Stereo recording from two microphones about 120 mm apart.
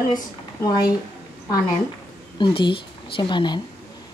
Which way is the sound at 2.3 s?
45° left (ahead or behind).